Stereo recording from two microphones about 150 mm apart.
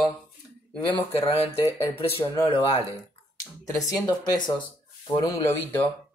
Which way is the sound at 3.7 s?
25° left (ahead or behind).